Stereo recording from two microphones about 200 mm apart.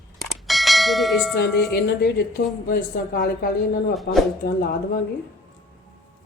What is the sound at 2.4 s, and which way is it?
A woman's voice, 40° left (ahead or behind).